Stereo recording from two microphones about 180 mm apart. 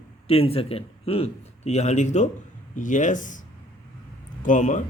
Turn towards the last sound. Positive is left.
turn(degrees=45)  # may be behind; listen again after turning